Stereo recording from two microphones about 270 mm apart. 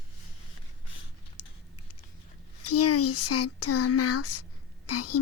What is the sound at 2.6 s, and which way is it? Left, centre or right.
A woman's voice, left.